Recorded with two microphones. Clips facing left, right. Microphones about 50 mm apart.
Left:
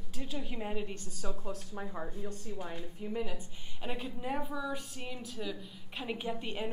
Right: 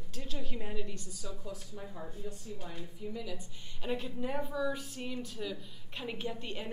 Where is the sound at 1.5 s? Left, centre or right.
Left.